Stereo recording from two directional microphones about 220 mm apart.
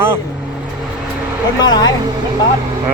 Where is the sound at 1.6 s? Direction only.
20° left (ahead or behind).